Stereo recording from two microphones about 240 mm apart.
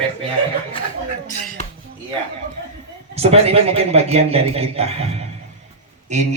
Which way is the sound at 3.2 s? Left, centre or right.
Right.